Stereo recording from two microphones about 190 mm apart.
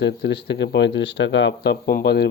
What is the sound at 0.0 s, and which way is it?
Speech, 65° left (ahead or behind).